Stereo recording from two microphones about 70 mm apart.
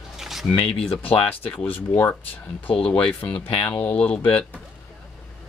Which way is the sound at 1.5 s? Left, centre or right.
Left.